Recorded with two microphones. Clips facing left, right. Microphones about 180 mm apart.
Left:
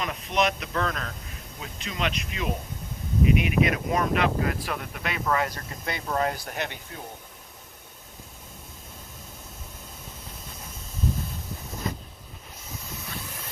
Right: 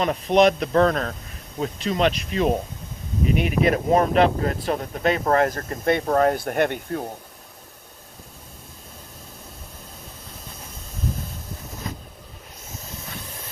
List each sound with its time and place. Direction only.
0.0 s speech: 35° right (ahead or behind); by 7.0 s 55° right (ahead or behind)